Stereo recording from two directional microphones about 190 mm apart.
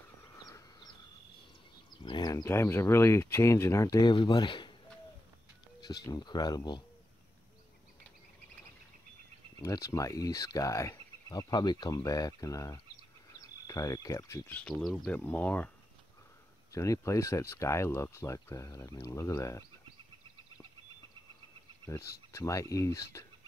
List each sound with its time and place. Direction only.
0.4 s bird: 20° left (ahead or behind)
2.0 s speech: 20° left (ahead or behind)
5.8 s speech: 20° left (ahead or behind)
9.6 s speech: 15° left (ahead or behind)
16.7 s speech: 15° left (ahead or behind)
21.8 s speech: 15° left (ahead or behind)